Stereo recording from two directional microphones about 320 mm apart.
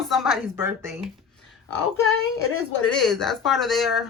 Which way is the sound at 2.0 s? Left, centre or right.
Left.